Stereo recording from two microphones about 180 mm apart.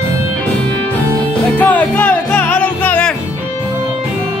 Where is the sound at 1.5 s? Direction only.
10° left (ahead or behind).